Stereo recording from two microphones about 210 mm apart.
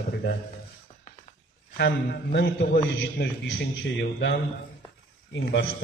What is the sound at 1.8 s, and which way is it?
A man's voice, 50° left (ahead or behind).